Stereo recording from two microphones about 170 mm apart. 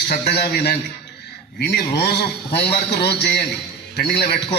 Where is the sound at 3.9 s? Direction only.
70° left (ahead or behind).